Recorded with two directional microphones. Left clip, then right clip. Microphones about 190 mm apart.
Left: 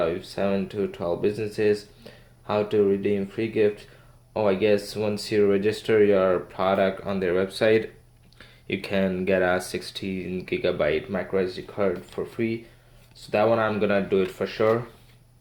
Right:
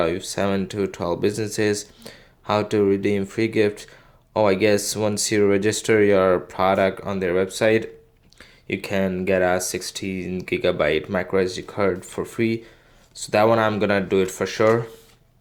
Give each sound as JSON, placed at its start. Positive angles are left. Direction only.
{"t": 0.0, "sound": "speech", "side_deg": -45}